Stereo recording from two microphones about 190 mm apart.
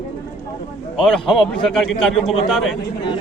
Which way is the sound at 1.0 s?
Centre (ahead or behind).